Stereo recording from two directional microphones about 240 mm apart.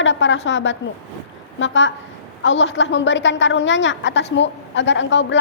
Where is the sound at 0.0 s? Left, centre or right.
Left.